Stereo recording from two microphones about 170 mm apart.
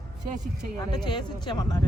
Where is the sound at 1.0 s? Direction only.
25° left (ahead or behind).